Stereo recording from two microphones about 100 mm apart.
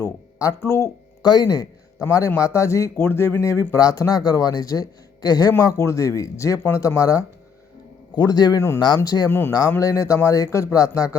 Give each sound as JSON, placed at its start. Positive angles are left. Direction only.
{"t": 0.0, "sound": "a sound", "side_deg": 30}
{"t": 0.6, "sound": "speech", "side_deg": 25}
{"t": 1.2, "sound": "a man's voice", "side_deg": 45}
{"t": 8.1, "sound": "a man's voice", "side_deg": 40}